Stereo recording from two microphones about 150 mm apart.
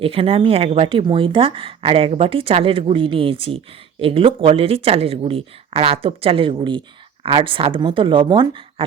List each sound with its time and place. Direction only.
0.0 s speech: 40° right (ahead or behind)